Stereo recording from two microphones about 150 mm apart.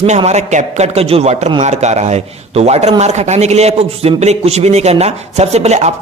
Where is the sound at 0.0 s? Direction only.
45° right (ahead or behind).